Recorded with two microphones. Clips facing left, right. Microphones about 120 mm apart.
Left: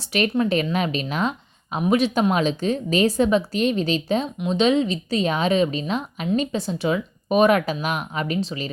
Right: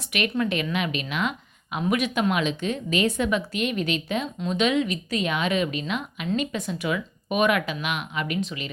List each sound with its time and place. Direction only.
0.1 s speech: 35° left (ahead or behind)